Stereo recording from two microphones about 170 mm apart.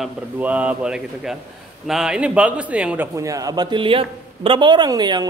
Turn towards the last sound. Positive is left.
turn(degrees=-25)  # may be behind; listen again after turning